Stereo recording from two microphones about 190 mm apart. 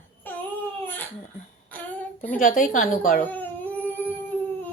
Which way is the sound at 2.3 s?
45° left (ahead or behind).